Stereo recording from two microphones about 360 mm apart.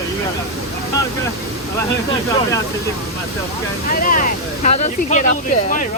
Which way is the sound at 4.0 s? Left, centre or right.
Left.